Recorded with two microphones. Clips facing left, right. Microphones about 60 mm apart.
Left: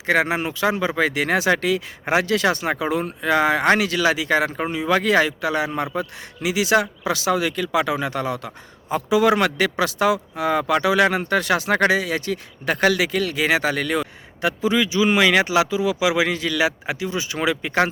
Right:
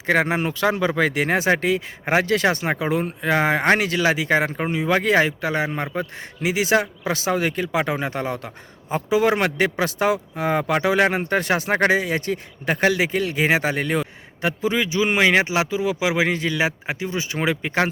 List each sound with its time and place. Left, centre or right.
0.0 s speech: right
13.3 s speech: right